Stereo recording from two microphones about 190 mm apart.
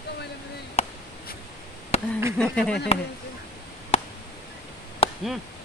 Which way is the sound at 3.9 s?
35° left (ahead or behind).